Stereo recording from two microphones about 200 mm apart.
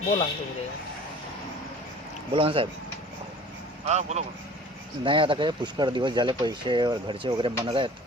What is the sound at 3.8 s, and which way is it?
Speech, 35° right (ahead or behind).